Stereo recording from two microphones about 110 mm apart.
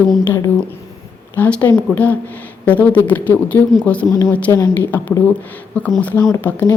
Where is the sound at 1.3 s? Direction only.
15° left (ahead or behind).